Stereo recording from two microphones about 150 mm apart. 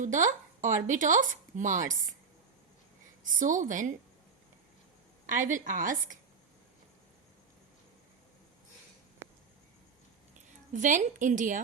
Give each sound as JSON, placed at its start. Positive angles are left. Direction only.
{"t": 0.0, "sound": "speech", "side_deg": -60}
{"t": 3.2, "sound": "speech", "side_deg": -60}
{"t": 5.2, "sound": "speech", "side_deg": -60}
{"t": 10.3, "sound": "a woman's voice", "side_deg": -55}